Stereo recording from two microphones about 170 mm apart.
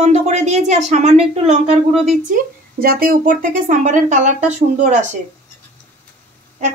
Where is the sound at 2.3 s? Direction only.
55° right (ahead or behind).